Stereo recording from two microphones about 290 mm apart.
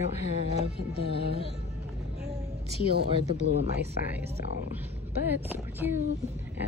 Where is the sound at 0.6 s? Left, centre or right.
Right.